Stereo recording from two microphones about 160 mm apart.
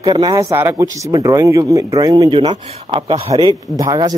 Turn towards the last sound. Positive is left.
turn(degrees=-20)  # may be behind; listen again after turning